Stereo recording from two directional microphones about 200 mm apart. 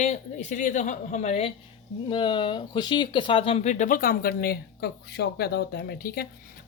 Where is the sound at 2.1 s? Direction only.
25° left (ahead or behind).